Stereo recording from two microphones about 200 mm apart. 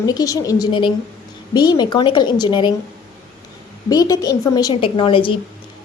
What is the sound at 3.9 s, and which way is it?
A woman's voice, 20° left (ahead or behind).